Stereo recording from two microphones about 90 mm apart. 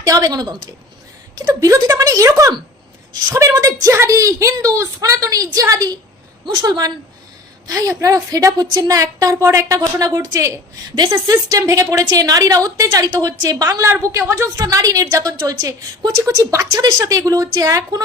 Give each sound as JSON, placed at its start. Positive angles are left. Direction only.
{"t": 0.0, "sound": "a woman's voice", "side_deg": -40}
{"t": 6.4, "sound": "a woman's voice", "side_deg": -55}
{"t": 7.7, "sound": "a woman's voice", "side_deg": -40}
{"t": 14.6, "sound": "a woman's voice", "side_deg": -45}